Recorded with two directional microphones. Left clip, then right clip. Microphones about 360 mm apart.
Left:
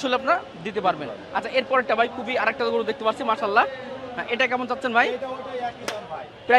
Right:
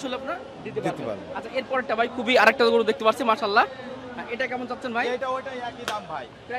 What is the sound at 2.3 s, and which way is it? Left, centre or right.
Speech, right.